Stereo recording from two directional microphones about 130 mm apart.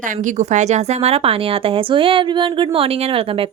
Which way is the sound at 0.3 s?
70° right (ahead or behind).